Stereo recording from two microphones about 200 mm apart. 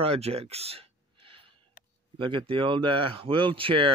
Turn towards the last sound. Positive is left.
turn(degrees=-25)  # may be behind; listen again after turning